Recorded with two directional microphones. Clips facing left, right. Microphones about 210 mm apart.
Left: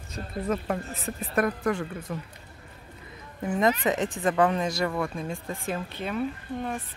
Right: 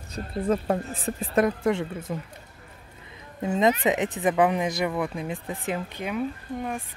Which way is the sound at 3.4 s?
20° right (ahead or behind).